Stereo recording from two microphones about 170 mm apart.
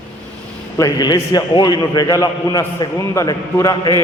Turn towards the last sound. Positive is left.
turn(degrees=20)  # may be behind; listen again after turning